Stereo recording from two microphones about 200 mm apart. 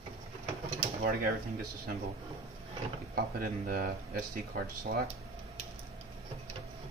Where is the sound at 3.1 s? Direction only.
45° right (ahead or behind).